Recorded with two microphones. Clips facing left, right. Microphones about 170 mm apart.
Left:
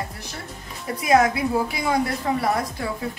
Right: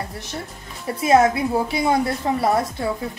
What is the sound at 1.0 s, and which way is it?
A woman's voice, 25° right (ahead or behind).